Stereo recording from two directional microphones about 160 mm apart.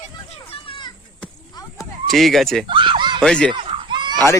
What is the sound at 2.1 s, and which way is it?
Speech, centre (ahead or behind).